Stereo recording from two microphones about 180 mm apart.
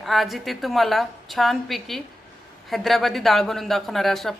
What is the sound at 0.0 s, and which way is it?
Speech, centre (ahead or behind).